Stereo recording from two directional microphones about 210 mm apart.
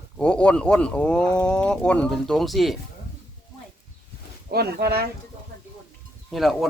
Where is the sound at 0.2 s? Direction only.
5° left (ahead or behind).